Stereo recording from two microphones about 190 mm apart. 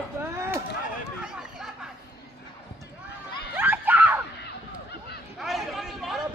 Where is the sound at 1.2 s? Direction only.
5° right (ahead or behind).